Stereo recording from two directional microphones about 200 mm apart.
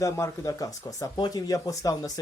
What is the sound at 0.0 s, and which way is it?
Speech, 15° left (ahead or behind).